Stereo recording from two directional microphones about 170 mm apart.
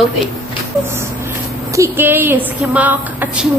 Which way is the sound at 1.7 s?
15° right (ahead or behind).